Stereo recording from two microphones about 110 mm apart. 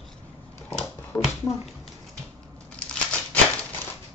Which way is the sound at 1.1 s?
15° left (ahead or behind).